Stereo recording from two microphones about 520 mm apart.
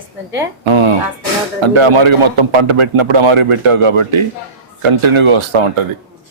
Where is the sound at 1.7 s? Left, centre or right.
Right.